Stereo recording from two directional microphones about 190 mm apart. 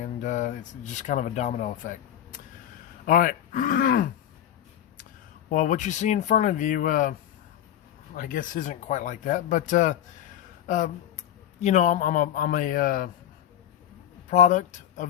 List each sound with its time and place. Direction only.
0.0 s speech: 40° left (ahead or behind)
3.1 s speech: 45° left (ahead or behind)
5.5 s speech: 40° left (ahead or behind)
8.1 s speech: 45° left (ahead or behind)
14.3 s speech: 40° left (ahead or behind)